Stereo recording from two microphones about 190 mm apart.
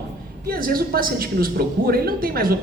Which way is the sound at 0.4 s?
50° right (ahead or behind).